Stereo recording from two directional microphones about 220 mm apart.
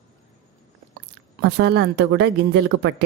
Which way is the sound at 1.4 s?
50° right (ahead or behind).